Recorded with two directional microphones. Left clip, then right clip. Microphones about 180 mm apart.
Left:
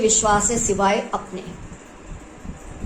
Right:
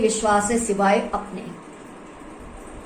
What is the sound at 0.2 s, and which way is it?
Speech, 45° left (ahead or behind).